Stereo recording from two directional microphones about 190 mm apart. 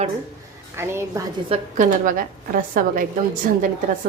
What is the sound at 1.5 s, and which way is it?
A woman's voice, 40° right (ahead or behind).